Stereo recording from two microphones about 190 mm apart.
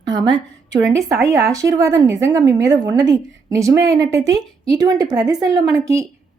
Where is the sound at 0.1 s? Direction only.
20° right (ahead or behind).